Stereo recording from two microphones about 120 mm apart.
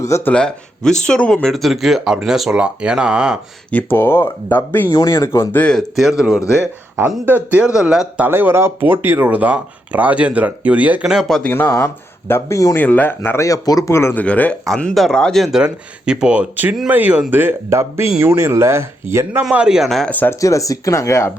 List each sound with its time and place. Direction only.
0.0 s speech: 20° left (ahead or behind); by 3.3 s 10° right (ahead or behind)
3.7 s speech: 15° left (ahead or behind)
5.5 s speech: 10° left (ahead or behind)
6.0 s speech: 5° right (ahead or behind)
7.3 s speech: 15° right (ahead or behind)
11.4 s speech: 20° left (ahead or behind)
12.8 s speech: 15° left (ahead or behind)
15.5 s speech: 5° right (ahead or behind)
19.5 s speech: 5° right (ahead or behind)
20.1 s speech: 15° left (ahead or behind)
20.4 s speech: 25° left (ahead or behind)